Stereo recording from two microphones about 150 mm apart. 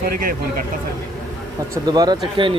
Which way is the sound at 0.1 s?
70° right (ahead or behind).